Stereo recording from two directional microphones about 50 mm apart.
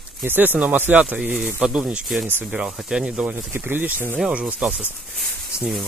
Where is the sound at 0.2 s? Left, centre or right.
Right.